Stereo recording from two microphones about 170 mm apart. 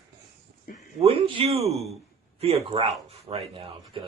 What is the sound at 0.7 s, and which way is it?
Speech, 50° left (ahead or behind).